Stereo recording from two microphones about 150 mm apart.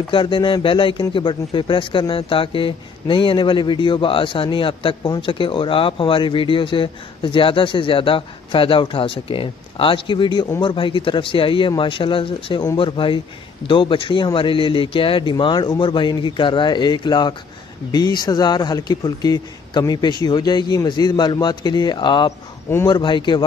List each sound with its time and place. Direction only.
0.1 s a man's voice: 35° left (ahead or behind)